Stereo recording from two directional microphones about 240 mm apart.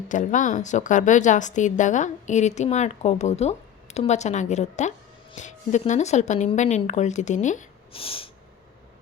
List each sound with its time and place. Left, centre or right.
0.1 s a woman's voice: left